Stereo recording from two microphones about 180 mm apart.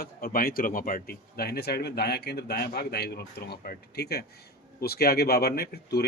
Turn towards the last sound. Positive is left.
turn(degrees=60)  # may be behind; listen again after turning